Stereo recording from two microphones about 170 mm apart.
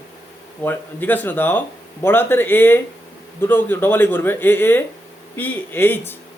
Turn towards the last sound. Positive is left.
turn(degrees=10)  # may be behind; listen again after turning